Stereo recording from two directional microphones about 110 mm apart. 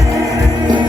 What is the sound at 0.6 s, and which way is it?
Music, 45° right (ahead or behind).